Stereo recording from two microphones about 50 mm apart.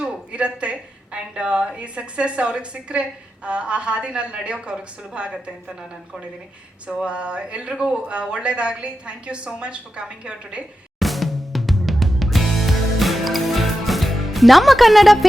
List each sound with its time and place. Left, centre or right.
0.0 s a woman's voice: right
6.8 s a woman's voice: right
11.0 s music: centre